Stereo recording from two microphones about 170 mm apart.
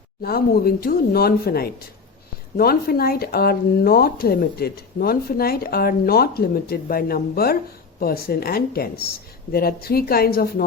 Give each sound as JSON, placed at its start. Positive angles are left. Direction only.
{"t": 0.2, "sound": "speech", "side_deg": 65}